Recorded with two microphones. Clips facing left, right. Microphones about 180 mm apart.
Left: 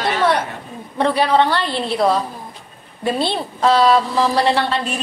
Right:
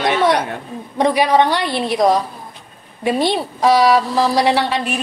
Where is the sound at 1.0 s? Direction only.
15° right (ahead or behind).